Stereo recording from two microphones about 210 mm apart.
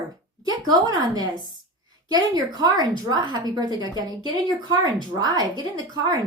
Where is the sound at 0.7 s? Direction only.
20° right (ahead or behind).